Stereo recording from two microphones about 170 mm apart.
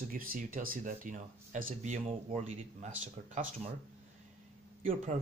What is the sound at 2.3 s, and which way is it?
Speech, 35° right (ahead or behind).